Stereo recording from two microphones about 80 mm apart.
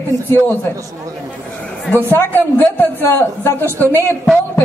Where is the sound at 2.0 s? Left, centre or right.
Left.